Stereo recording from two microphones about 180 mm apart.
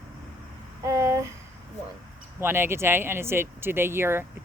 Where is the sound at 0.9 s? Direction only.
15° right (ahead or behind).